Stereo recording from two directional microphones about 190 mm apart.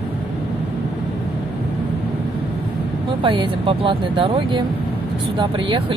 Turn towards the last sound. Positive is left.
turn(degrees=-25)  # may be behind; listen again after turning